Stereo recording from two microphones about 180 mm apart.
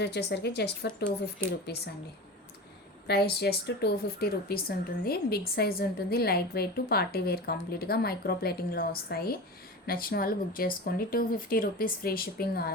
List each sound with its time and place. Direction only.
0.0 s a woman's voice: 70° left (ahead or behind)
3.1 s speech: 65° left (ahead or behind)